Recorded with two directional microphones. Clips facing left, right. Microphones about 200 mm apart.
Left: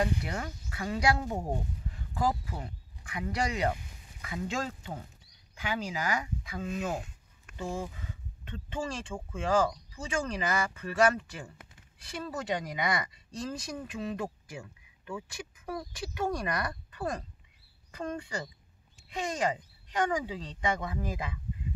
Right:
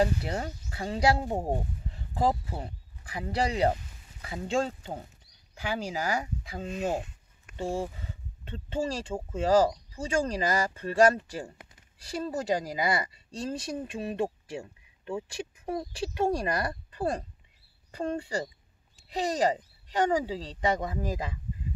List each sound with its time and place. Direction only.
0.0 s speech: 30° right (ahead or behind)